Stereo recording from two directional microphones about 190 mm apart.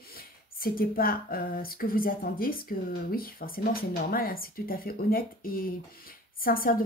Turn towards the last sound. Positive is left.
turn(degrees=50)  # may be behind; listen again after turning